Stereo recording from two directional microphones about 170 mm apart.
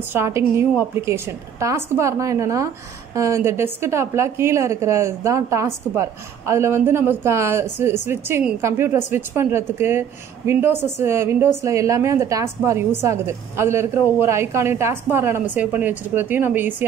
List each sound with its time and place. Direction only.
0.1 s a woman's voice: 15° right (ahead or behind)